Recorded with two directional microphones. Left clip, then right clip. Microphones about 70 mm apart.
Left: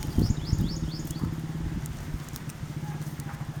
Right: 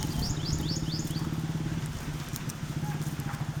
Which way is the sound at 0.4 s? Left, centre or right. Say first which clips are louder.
Right 1 dB; right.